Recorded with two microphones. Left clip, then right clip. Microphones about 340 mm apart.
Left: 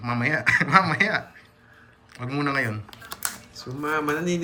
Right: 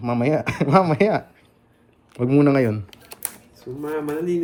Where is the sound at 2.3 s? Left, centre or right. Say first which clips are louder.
Right 7 dB; centre.